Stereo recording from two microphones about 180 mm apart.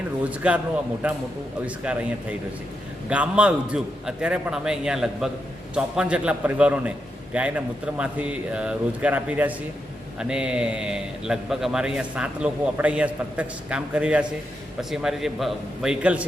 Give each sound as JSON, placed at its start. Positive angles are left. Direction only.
{"t": 0.3, "sound": "a man's voice", "side_deg": -5}